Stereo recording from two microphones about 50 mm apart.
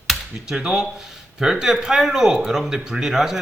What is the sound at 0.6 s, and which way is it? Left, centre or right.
Speech, centre.